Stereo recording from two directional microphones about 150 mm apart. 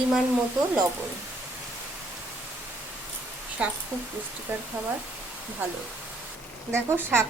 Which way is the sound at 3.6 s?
10° right (ahead or behind).